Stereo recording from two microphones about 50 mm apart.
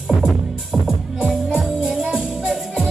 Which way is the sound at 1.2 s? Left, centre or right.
Right.